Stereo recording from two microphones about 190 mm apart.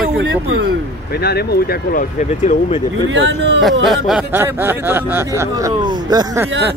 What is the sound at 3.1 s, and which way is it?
Speech, 75° right (ahead or behind).